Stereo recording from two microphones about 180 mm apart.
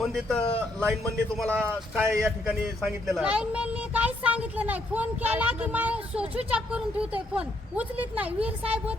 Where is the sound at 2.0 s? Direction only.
15° right (ahead or behind).